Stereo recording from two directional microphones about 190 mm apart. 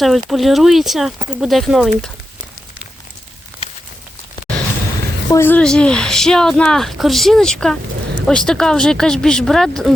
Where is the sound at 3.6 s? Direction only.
30° left (ahead or behind).